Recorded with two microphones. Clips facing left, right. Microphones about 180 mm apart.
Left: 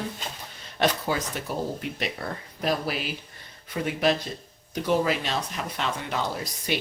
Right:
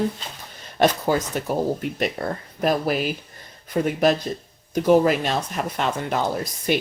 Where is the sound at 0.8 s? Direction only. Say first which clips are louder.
Right 6 dB; 45° right (ahead or behind).